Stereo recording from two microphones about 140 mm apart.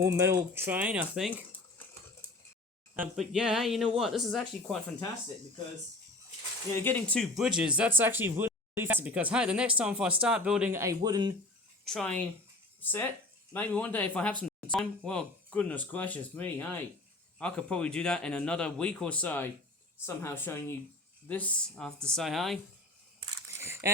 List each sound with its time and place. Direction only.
0.0 s speech: 20° right (ahead or behind)
3.2 s speech: 5° right (ahead or behind)
6.7 s speech: 10° left (ahead or behind)
7.3 s speech: 5° right (ahead or behind)
10.7 s speech: 20° right (ahead or behind)
11.9 s speech: 5° left (ahead or behind)
23.6 s a sound: 20° right (ahead or behind)